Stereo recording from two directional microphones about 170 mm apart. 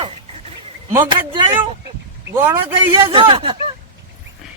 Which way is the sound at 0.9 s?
30° right (ahead or behind).